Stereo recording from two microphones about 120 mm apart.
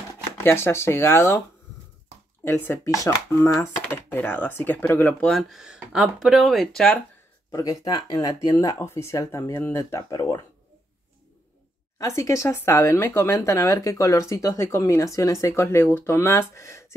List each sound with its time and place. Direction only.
0.4 s speech: 20° left (ahead or behind)
2.4 s speech: 20° left (ahead or behind)
5.3 s speech: centre (ahead or behind)
7.5 s speech: 30° left (ahead or behind)
12.2 s speech: 25° left (ahead or behind)